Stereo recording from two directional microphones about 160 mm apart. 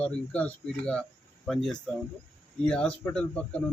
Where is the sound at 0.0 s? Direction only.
10° left (ahead or behind).